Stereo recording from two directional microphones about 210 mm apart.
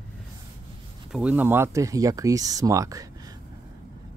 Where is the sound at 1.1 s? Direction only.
5° right (ahead or behind).